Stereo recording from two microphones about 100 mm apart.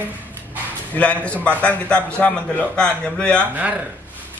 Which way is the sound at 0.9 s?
15° left (ahead or behind).